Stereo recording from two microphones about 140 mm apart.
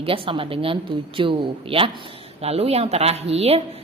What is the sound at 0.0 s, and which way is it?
A woman's voice, 40° right (ahead or behind).